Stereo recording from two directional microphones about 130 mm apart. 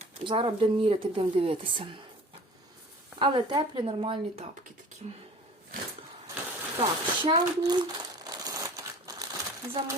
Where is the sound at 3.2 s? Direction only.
40° right (ahead or behind).